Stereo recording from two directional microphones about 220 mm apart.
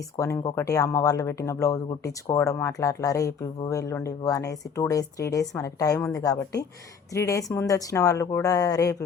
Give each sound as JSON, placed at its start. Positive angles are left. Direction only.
{"t": 0.2, "sound": "speech", "side_deg": 10}